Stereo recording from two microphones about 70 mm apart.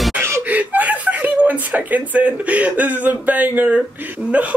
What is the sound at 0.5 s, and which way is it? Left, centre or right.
Speech, right.